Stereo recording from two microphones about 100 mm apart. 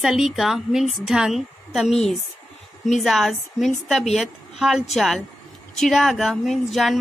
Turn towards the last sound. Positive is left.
turn(degrees=0)  # may be behind; listen again after turning